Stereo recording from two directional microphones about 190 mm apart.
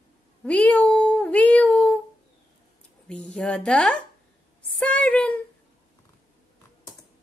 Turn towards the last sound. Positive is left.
turn(degrees=5)  # may be behind; listen again after turning